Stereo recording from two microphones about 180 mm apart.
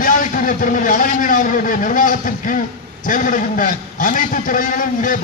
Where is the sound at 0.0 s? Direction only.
50° left (ahead or behind).